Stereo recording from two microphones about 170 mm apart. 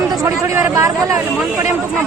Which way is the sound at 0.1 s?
20° right (ahead or behind).